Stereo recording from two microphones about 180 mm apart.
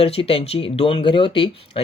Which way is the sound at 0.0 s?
30° left (ahead or behind).